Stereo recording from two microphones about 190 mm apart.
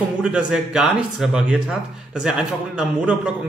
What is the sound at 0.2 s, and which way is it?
Speech, 5° right (ahead or behind).